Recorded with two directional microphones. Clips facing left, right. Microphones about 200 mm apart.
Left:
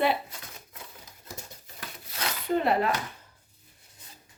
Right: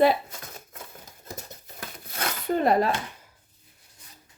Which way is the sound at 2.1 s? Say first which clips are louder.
Right 1 dB; 45° right (ahead or behind).